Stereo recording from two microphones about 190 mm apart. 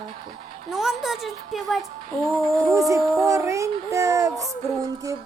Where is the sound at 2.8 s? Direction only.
15° right (ahead or behind).